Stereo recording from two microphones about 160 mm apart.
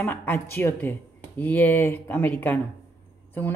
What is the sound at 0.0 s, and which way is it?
A woman's voice, 10° left (ahead or behind).